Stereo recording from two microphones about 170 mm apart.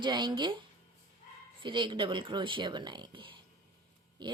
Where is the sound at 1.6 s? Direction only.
30° right (ahead or behind).